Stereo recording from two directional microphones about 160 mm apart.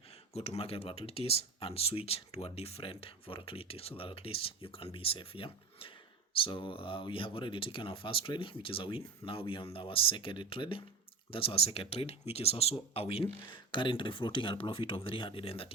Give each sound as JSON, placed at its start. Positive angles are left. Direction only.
{"t": 0.3, "sound": "speech", "side_deg": 40}